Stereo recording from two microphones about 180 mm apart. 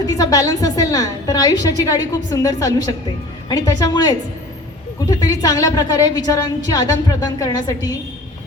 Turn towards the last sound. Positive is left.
turn(degrees=20)  # may be behind; listen again after turning